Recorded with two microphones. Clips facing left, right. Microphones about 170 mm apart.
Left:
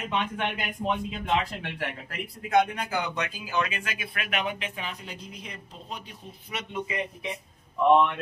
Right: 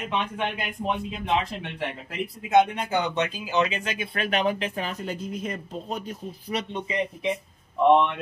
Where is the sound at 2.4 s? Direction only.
25° right (ahead or behind).